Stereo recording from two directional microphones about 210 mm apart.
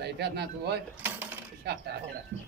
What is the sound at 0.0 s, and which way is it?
Speech, 50° right (ahead or behind).